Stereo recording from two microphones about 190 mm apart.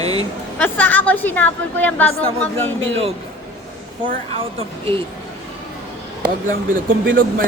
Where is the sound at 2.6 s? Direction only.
90° right.